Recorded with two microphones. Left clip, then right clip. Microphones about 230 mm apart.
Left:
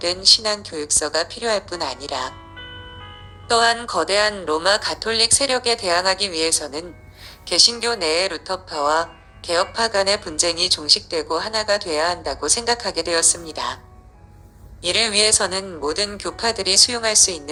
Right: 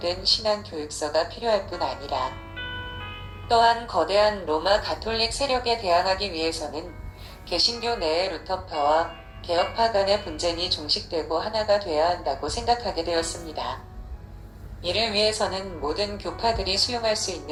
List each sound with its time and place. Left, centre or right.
0.0 s a woman's voice: left
2.6 s music: centre
3.5 s a woman's voice: left
14.8 s a woman's voice: left